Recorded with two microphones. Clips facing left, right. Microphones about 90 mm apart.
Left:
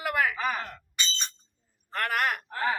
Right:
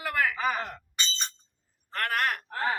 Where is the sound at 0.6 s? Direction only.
20° right (ahead or behind).